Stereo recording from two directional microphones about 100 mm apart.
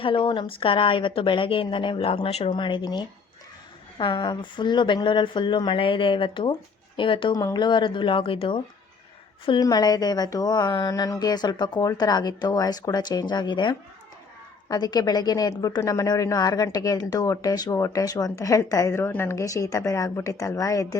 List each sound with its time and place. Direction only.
0.0 s a woman's voice: 60° left (ahead or behind); by 2.5 s 80° left
2.5 s a woman's voice: 55° left (ahead or behind)
9.6 s speech: 40° left (ahead or behind)